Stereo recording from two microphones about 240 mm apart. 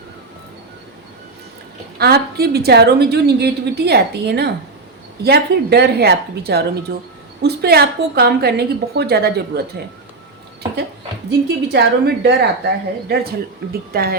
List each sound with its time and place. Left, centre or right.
2.0 s a woman's voice: right
11.3 s a woman's voice: right